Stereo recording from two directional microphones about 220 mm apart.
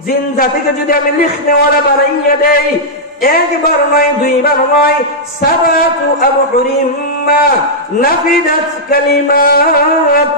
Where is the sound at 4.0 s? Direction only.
40° left (ahead or behind).